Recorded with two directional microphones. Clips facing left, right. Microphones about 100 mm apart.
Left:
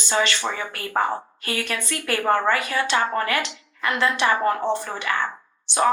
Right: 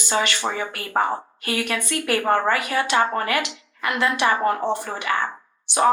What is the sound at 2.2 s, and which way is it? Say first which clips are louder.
A woman's voice: left 2 dB; 35° right (ahead or behind).